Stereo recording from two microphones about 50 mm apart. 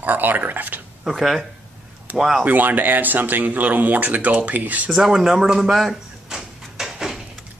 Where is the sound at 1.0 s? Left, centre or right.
Centre.